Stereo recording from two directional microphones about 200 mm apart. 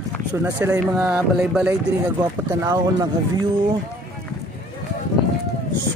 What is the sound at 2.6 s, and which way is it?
Speech, 20° right (ahead or behind).